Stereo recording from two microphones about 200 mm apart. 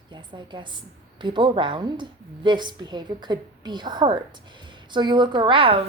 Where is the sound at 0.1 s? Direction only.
25° right (ahead or behind).